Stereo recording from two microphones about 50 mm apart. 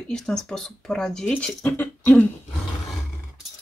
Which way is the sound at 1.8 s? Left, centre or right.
Left.